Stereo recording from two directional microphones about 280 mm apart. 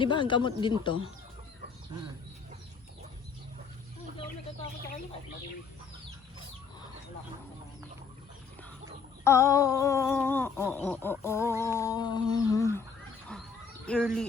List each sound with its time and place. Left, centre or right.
0.0 s humming: centre
9.2 s humming: centre
13.8 s speech: centre